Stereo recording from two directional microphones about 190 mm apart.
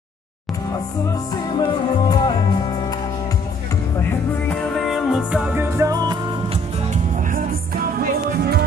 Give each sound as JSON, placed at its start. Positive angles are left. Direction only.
{"t": 1.3, "sound": "music", "side_deg": 20}
{"t": 4.0, "sound": "music", "side_deg": 5}
{"t": 6.9, "sound": "music", "side_deg": -45}